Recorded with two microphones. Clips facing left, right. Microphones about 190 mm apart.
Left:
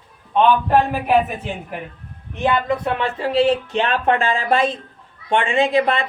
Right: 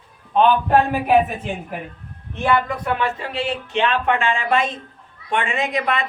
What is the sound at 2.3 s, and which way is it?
Speech, 20° left (ahead or behind).